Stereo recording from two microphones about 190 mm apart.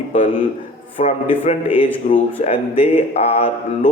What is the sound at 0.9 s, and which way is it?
Speech, 30° left (ahead or behind).